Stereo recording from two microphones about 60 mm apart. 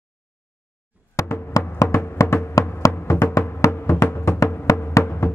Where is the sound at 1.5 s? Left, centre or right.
Left.